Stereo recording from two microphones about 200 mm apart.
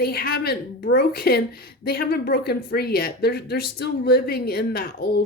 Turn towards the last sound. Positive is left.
turn(degrees=50)  # may be behind; listen again after turning